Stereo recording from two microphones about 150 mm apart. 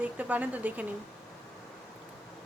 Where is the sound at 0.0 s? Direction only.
10° right (ahead or behind).